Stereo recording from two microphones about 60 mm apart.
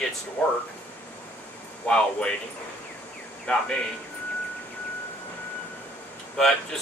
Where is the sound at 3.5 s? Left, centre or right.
Centre.